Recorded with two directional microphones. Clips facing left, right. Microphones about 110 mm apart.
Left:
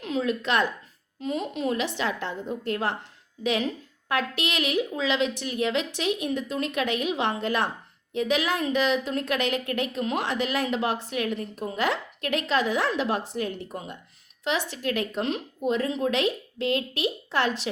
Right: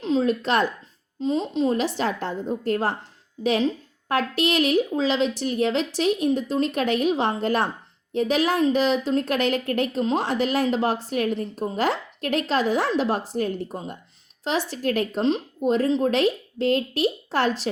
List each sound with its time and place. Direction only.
0.0 s speech: 30° right (ahead or behind)
1.2 s a woman's voice: 25° right (ahead or behind)